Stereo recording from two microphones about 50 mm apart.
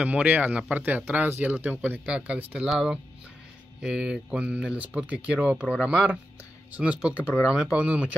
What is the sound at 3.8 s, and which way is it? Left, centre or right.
Speech, centre.